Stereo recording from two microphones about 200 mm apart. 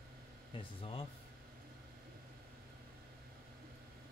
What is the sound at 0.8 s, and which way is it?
Speech, 25° left (ahead or behind).